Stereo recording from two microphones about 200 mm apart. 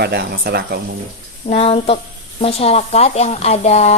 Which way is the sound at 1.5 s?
30° left (ahead or behind).